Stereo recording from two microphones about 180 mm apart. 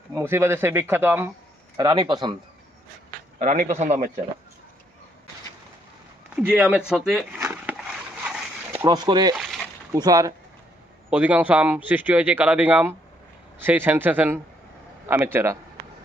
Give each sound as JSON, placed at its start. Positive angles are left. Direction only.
{"t": 0.1, "sound": "speech", "side_deg": -15}
{"t": 3.3, "sound": "a man's voice", "side_deg": -45}
{"t": 6.3, "sound": "speech", "side_deg": -10}
{"t": 7.3, "sound": "a sound", "side_deg": -10}
{"t": 8.8, "sound": "speech", "side_deg": -25}
{"t": 9.3, "sound": "speech", "side_deg": 0}
{"t": 9.9, "sound": "speech", "side_deg": -20}
{"t": 11.1, "sound": "speech", "side_deg": -10}